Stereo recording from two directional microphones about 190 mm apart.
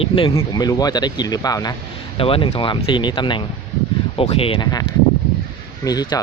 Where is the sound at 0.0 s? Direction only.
25° left (ahead or behind).